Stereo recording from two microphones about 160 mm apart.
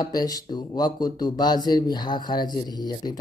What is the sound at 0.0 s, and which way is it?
Mantra, 25° left (ahead or behind).